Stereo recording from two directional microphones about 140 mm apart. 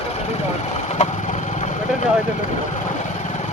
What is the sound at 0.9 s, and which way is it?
Vehicle, 55° left (ahead or behind).